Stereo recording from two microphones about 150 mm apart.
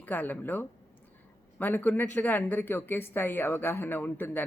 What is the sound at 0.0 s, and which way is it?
Speech, 10° left (ahead or behind).